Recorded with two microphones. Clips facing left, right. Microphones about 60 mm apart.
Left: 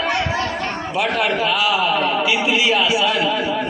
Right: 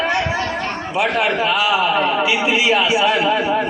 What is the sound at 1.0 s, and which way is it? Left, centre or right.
A man's voice, centre.